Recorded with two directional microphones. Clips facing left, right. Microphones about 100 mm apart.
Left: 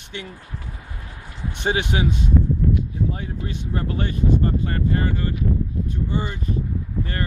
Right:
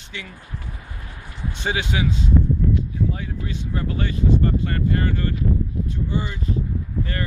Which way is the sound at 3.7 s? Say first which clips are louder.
Left 1 dB; 30° left (ahead or behind).